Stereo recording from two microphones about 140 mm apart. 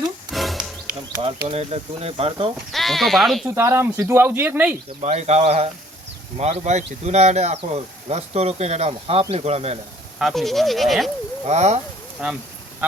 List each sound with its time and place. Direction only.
0.3 s wild animals: centre (ahead or behind)
1.2 s speech: 45° right (ahead or behind)
2.7 s speech: centre (ahead or behind)
3.4 s speech: 20° right (ahead or behind)
4.9 s speech: 50° right (ahead or behind)
10.2 s speech: centre (ahead or behind)
11.4 s speech: 50° right (ahead or behind)
12.2 s speech: 5° right (ahead or behind)